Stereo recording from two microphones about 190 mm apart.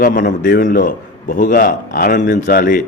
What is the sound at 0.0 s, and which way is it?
A man's voice, 45° left (ahead or behind).